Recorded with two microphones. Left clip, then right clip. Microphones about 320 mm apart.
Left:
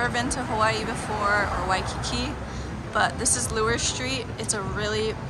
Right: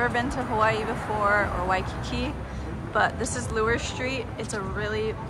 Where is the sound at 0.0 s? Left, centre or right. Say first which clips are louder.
Even; centre.